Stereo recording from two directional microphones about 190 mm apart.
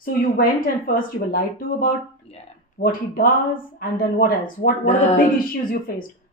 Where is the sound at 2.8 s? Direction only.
50° left (ahead or behind).